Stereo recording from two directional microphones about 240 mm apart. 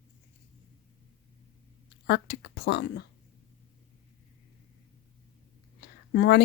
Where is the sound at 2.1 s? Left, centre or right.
Left.